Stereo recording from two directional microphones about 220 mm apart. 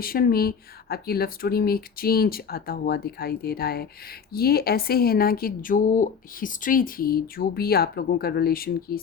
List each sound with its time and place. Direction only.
0.0 s speech: 40° left (ahead or behind)